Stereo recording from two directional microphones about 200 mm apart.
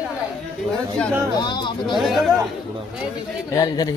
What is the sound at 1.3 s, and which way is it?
Speech, 25° left (ahead or behind).